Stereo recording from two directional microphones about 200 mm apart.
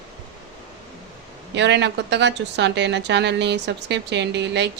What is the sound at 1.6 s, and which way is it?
Speech, 60° right (ahead or behind).